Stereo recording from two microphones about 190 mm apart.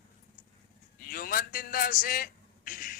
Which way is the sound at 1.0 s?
50° left (ahead or behind).